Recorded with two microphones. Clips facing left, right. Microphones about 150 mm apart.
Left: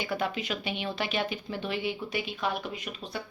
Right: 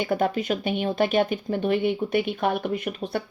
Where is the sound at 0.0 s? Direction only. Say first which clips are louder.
Right 7 dB; 45° right (ahead or behind).